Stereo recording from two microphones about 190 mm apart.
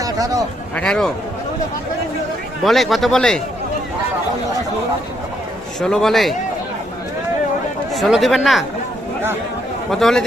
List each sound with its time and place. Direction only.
0.0 s a sound: 20° right (ahead or behind)
0.8 s speech: 5° left (ahead or behind)
2.6 s speech: centre (ahead or behind)
5.8 s speech: centre (ahead or behind)
7.9 s speech: centre (ahead or behind)
9.9 s speech: centre (ahead or behind)